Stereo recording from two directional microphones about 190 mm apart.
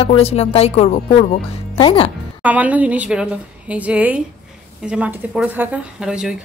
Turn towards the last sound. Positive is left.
turn(degrees=-5)  # may be behind; listen again after turning